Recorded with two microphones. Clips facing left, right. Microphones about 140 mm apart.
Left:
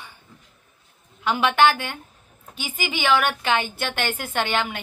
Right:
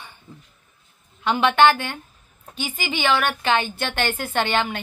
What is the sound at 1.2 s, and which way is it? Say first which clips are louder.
A woman's voice: right 2 dB; 10° left (ahead or behind).